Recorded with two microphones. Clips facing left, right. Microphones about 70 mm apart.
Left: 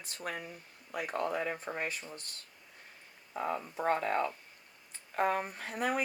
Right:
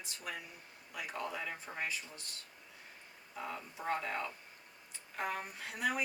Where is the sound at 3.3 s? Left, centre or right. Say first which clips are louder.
Left 8 dB; left.